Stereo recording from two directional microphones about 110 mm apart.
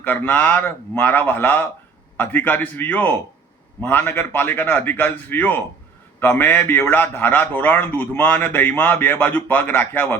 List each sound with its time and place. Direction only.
0.0 s a man's voice: 15° left (ahead or behind)